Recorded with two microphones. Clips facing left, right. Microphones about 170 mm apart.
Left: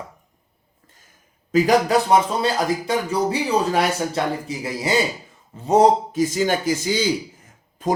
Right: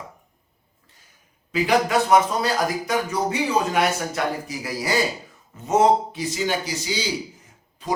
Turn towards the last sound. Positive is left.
turn(degrees=45)  # may be behind; listen again after turning